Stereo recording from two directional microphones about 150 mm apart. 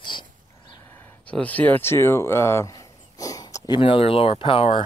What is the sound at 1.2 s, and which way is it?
Speech, 10° left (ahead or behind).